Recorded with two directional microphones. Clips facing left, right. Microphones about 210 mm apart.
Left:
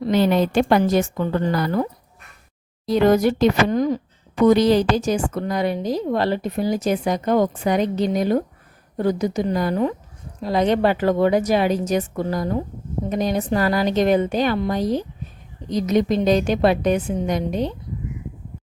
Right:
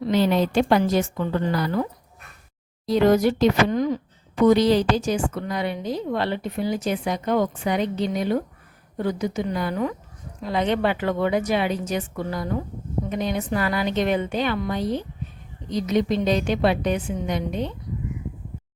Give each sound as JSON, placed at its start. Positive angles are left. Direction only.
{"t": 0.1, "sound": "a woman's voice", "side_deg": 55}